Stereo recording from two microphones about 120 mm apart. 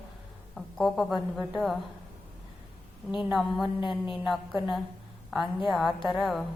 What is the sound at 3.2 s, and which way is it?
Speech, centre (ahead or behind).